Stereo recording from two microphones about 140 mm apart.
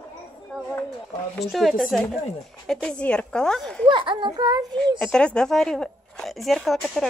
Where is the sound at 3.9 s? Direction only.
35° right (ahead or behind).